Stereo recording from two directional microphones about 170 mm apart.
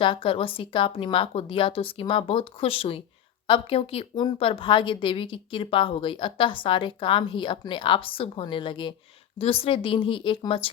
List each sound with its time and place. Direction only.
0.0 s a woman's voice: 30° left (ahead or behind)